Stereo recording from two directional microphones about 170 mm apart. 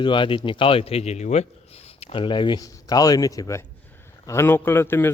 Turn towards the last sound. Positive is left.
turn(degrees=15)  # may be behind; listen again after turning